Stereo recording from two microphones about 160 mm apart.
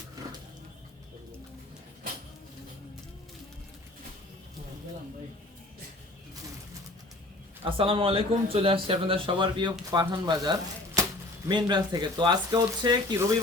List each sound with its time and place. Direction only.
7.6 s a man's voice: 35° right (ahead or behind)